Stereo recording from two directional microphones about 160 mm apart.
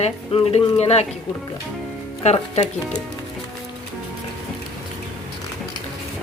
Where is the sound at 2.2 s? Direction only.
45° left (ahead or behind).